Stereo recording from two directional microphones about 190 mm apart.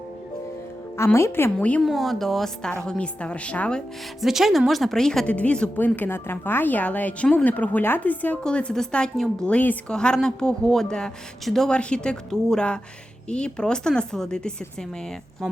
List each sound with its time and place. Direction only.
0.9 s a woman's voice: 15° left (ahead or behind)